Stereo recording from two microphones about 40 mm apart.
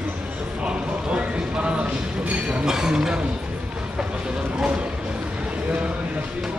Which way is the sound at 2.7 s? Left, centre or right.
Centre.